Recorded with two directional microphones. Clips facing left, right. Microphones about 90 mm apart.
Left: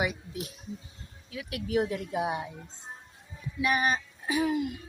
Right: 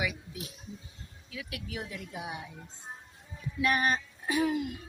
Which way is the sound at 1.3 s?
35° left (ahead or behind).